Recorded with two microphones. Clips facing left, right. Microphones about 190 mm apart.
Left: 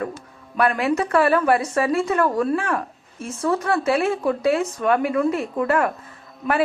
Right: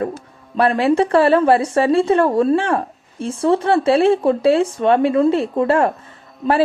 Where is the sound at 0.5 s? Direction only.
30° right (ahead or behind).